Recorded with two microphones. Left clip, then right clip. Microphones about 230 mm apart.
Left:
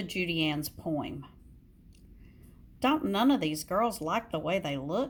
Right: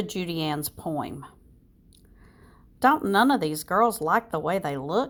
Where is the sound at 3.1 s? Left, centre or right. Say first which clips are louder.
Right 6 dB; centre.